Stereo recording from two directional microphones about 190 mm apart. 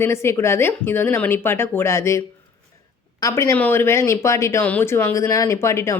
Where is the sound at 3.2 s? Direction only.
15° left (ahead or behind).